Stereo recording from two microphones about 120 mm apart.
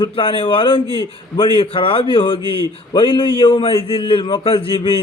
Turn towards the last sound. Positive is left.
turn(degrees=50)  # may be behind; listen again after turning